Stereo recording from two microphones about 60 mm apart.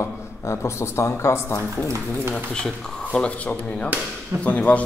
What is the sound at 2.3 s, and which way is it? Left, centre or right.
A man's voice, centre.